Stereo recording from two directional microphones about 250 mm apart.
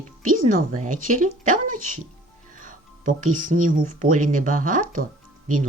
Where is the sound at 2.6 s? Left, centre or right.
Right.